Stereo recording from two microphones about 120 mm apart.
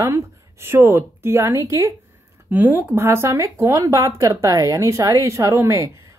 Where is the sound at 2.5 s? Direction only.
15° right (ahead or behind).